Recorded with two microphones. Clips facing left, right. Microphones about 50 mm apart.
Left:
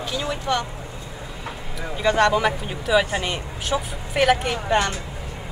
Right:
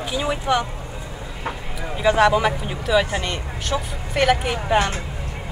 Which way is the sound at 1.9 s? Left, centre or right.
Centre.